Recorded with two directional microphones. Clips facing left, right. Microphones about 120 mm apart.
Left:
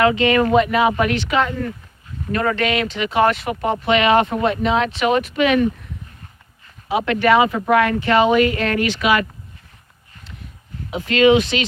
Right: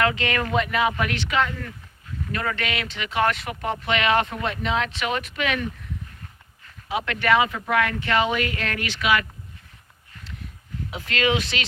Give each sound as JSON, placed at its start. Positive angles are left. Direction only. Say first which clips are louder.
{"t": 0.0, "sound": "speech", "louder": "left 8 dB", "side_deg": 15}
{"t": 4.3, "sound": "speech", "louder": "left 8 dB", "side_deg": 30}
{"t": 5.2, "sound": "speech", "louder": "left 9 dB", "side_deg": 15}
{"t": 6.9, "sound": "speech", "louder": "left 6 dB", "side_deg": 20}
{"t": 11.1, "sound": "speech", "louder": "left 10 dB", "side_deg": 10}